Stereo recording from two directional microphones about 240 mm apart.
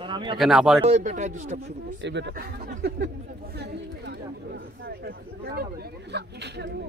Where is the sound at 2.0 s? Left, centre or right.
Right.